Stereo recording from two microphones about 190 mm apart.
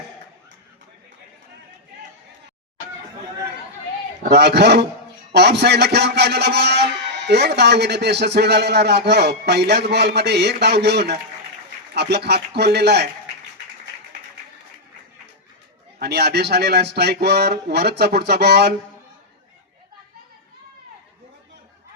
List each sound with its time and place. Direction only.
4.3 s a man's voice: 60° right (ahead or behind)
16.0 s a man's voice: 60° right (ahead or behind)